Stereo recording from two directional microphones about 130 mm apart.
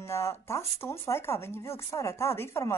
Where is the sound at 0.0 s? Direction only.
20° left (ahead or behind).